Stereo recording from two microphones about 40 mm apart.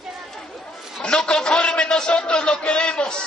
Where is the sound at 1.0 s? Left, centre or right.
Left.